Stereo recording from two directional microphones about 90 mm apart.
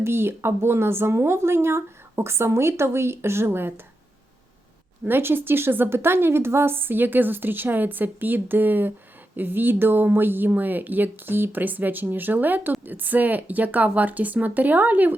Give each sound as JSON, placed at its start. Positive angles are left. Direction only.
{"t": 0.0, "sound": "a woman's voice", "side_deg": -25}
{"t": 5.0, "sound": "a woman's voice", "side_deg": -25}